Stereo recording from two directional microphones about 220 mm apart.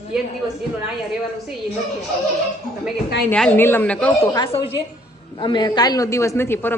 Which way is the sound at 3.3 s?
5° left (ahead or behind).